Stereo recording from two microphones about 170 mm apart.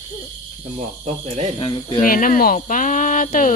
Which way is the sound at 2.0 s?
55° left (ahead or behind).